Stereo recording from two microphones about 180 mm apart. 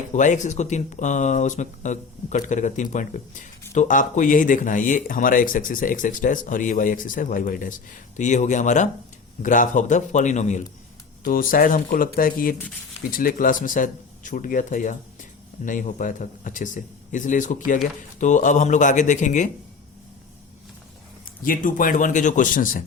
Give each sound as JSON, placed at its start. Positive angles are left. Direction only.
{"t": 0.1, "sound": "speech", "side_deg": 40}
{"t": 11.2, "sound": "speech", "side_deg": 50}
{"t": 21.4, "sound": "speech", "side_deg": 50}